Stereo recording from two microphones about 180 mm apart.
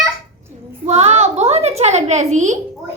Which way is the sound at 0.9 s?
35° right (ahead or behind).